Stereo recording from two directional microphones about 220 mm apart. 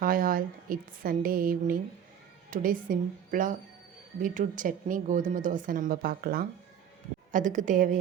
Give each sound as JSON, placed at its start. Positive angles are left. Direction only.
{"t": 0.0, "sound": "a woman's voice", "side_deg": -40}